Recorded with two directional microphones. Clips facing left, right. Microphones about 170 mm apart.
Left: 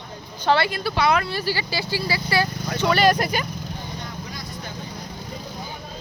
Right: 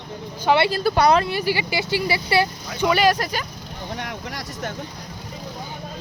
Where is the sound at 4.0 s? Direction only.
80° right.